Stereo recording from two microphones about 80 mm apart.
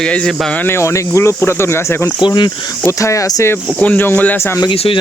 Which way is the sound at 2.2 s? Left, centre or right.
Left.